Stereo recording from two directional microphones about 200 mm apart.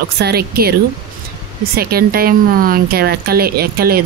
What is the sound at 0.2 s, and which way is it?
Speech, 50° right (ahead or behind).